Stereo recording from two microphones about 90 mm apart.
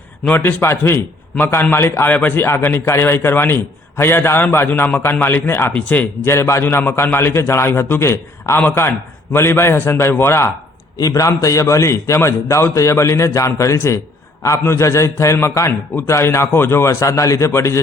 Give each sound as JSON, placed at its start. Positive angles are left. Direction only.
{"t": 0.3, "sound": "speech", "side_deg": 25}
{"t": 6.3, "sound": "speech", "side_deg": 30}
{"t": 10.9, "sound": "a man's voice", "side_deg": 40}